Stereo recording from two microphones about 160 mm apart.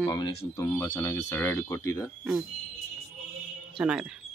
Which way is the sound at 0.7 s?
15° left (ahead or behind).